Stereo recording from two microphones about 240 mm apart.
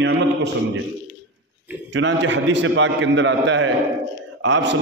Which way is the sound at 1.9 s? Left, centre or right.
Right.